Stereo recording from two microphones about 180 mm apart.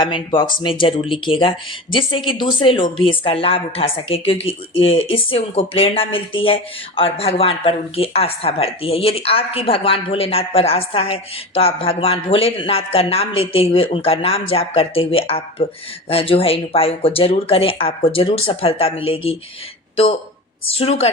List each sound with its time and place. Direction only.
0.0 s speech: 25° left (ahead or behind)
20.7 s speech: 35° left (ahead or behind)